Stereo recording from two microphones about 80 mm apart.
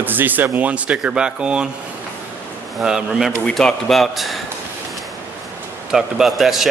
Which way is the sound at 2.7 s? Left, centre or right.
Centre.